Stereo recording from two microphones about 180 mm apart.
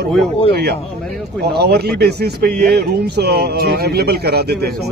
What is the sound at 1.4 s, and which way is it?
Speech, 65° right (ahead or behind).